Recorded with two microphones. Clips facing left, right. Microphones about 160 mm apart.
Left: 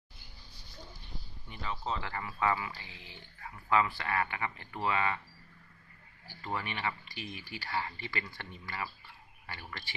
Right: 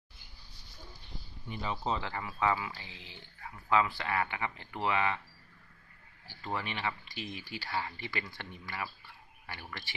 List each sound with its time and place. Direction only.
1.5 s speech: 20° right (ahead or behind)
6.2 s speech: 20° right (ahead or behind)